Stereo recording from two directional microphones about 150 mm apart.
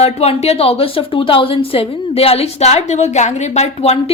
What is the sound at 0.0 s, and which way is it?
Speech, 45° left (ahead or behind).